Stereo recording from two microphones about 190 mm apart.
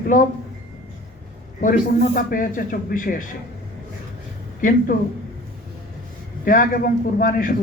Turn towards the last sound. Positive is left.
turn(degrees=45)  # may be behind; listen again after turning